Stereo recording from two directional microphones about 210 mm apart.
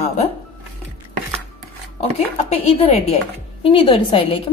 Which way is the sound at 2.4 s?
30° left (ahead or behind).